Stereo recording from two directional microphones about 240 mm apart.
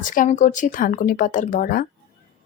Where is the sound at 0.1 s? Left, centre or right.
Left.